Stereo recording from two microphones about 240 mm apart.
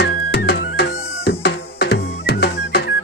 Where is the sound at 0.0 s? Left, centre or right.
Left.